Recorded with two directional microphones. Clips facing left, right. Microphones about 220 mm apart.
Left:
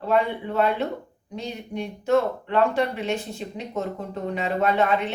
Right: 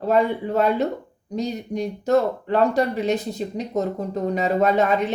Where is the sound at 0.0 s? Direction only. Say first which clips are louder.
Right 3 dB; 40° right (ahead or behind).